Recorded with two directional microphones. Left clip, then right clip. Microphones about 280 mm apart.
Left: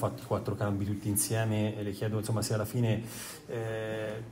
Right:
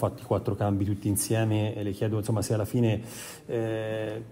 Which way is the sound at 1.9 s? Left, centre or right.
Right.